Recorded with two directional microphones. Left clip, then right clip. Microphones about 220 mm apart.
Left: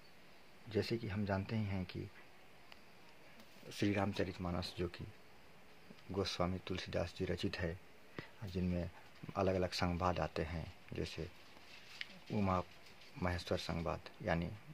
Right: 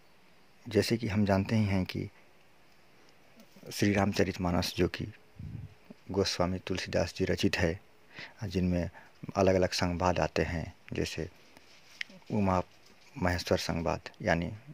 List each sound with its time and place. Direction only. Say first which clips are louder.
0.7 s speech: right 10 dB; 55° right (ahead or behind)
3.6 s speech: right 8 dB; 40° right (ahead or behind)
6.1 s speech: right 9 dB; 40° right (ahead or behind)
12.0 s a sound: right 8 dB; 35° right (ahead or behind)
13.2 s speech: right 10 dB; 40° right (ahead or behind)